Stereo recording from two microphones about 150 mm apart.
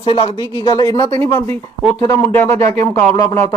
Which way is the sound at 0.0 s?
35° left (ahead or behind).